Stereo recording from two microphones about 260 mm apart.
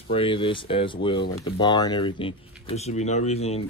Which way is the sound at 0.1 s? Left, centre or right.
Centre.